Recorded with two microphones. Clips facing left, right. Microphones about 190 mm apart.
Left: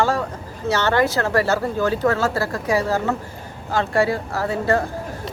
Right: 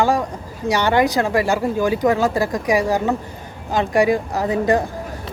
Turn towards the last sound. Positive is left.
turn(degrees=-15)  # may be behind; listen again after turning